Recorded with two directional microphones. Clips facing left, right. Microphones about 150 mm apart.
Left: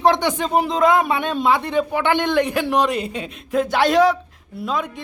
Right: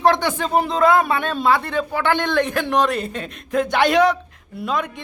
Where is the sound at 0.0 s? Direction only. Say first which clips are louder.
Even; 15° left (ahead or behind).